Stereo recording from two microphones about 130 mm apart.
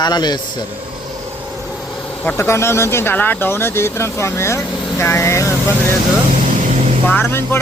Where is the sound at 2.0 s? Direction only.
15° left (ahead or behind).